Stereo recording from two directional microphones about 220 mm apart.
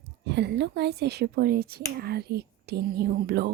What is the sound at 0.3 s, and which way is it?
Speech, 50° right (ahead or behind).